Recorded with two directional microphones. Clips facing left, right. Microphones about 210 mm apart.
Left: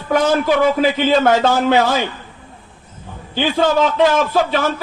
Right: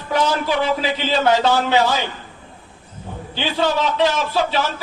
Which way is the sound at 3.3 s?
50° left (ahead or behind).